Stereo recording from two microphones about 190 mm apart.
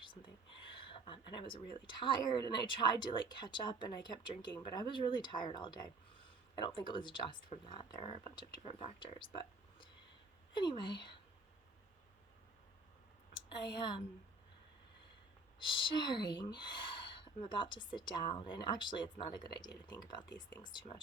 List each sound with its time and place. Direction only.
0.0 s speech: 25° left (ahead or behind)
10.5 s speech: 25° left (ahead or behind)
13.3 s speech: 25° left (ahead or behind)
15.5 s speech: 25° left (ahead or behind)